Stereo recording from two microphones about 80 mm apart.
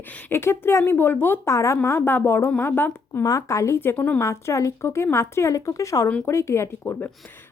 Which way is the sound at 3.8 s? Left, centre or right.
Left.